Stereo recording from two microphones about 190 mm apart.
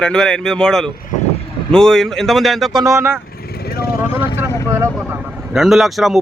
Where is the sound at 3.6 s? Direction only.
55° left (ahead or behind).